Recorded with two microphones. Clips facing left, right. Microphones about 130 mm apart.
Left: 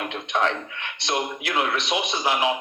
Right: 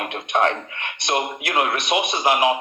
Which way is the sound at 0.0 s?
55° right (ahead or behind).